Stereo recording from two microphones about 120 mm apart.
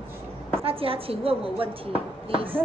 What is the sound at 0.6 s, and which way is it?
A woman's voice, 50° right (ahead or behind).